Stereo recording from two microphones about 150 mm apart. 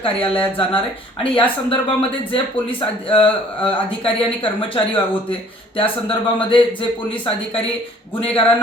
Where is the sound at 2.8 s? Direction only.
35° left (ahead or behind).